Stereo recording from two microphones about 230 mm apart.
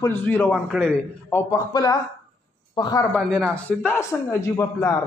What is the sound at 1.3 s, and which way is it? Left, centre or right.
Speech, centre.